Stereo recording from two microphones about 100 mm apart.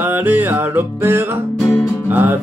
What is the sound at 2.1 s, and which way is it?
Speech, 20° right (ahead or behind).